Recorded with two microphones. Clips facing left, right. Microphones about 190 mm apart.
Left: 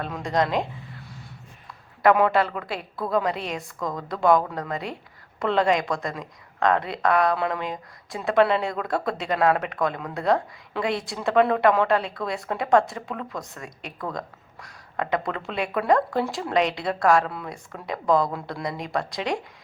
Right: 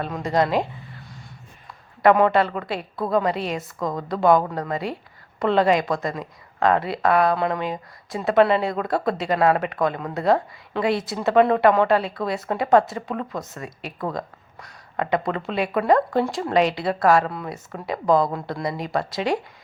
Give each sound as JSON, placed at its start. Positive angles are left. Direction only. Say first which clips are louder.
{"t": 0.0, "sound": "a woman's voice", "louder": "right 3 dB", "side_deg": -5}
{"t": 2.0, "sound": "a woman's voice", "louder": "right 2 dB", "side_deg": 0}
{"t": 3.8, "sound": "a woman's voice", "louder": "right 3 dB", "side_deg": -25}
{"t": 4.1, "sound": "a woman's voice", "louder": "right 2 dB", "side_deg": 0}